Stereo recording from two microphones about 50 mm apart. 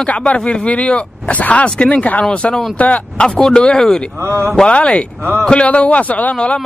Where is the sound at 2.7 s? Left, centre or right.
Left.